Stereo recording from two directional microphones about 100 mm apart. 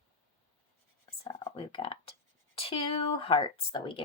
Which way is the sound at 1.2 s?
60° left (ahead or behind).